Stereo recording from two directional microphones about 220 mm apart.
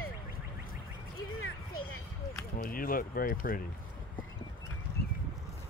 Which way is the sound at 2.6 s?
40° left (ahead or behind).